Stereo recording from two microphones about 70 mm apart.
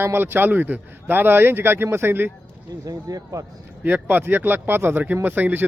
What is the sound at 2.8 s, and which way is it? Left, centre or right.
Speech, right.